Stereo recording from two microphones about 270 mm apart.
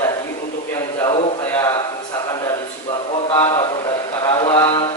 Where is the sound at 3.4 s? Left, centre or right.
Centre.